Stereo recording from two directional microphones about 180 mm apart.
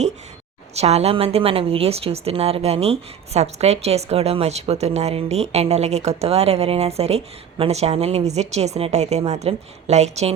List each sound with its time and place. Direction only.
0.8 s a woman's voice: 35° right (ahead or behind)